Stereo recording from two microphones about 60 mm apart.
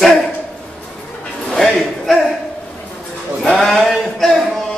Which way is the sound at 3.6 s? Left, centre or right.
Centre.